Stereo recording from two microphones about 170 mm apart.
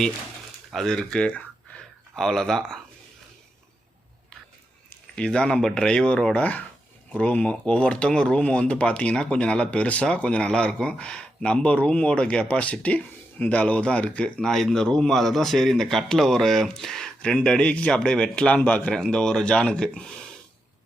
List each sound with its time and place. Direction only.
0.7 s speech: centre (ahead or behind)
5.1 s speech: 5° left (ahead or behind)